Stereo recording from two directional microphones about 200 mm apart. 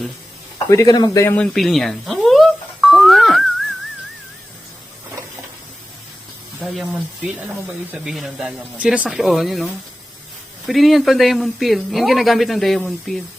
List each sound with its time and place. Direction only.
0.7 s speech: 15° left (ahead or behind)
1.5 s music: centre (ahead or behind)
6.6 s speech: centre (ahead or behind)